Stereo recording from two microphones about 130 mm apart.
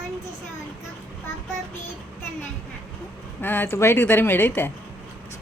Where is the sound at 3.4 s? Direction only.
15° left (ahead or behind).